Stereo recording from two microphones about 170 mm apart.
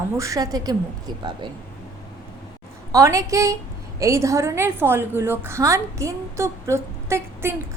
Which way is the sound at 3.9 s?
20° right (ahead or behind).